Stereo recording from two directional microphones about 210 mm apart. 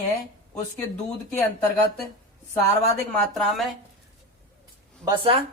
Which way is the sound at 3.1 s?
Centre (ahead or behind).